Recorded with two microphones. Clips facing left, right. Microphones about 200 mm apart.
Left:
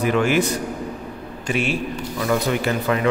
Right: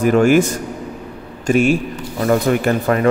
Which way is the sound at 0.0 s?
45° right (ahead or behind).